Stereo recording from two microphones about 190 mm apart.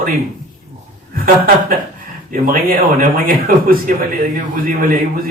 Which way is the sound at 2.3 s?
45° right (ahead or behind).